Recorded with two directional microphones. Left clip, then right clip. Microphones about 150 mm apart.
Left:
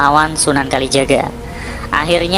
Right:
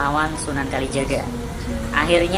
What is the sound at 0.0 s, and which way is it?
Speech, 45° left (ahead or behind).